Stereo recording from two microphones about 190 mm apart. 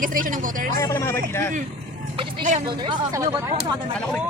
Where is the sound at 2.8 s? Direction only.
20° right (ahead or behind).